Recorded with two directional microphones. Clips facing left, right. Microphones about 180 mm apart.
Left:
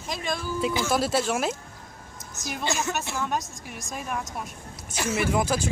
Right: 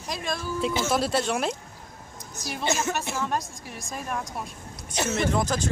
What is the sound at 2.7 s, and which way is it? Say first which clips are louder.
Speech: right 2 dB; 20° right (ahead or behind).